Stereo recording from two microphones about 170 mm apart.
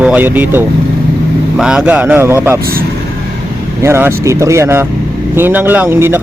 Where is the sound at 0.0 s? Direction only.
10° right (ahead or behind).